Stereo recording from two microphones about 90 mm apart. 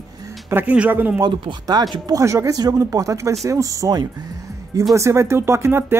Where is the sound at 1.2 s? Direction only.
50° right (ahead or behind).